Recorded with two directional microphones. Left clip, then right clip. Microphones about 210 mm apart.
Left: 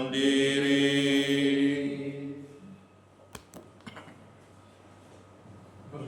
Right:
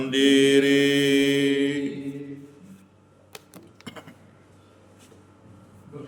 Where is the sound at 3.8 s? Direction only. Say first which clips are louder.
Right 6 dB; 45° right (ahead or behind).